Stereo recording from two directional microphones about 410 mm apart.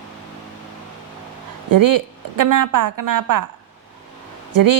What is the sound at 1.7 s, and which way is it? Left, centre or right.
A woman's voice, right.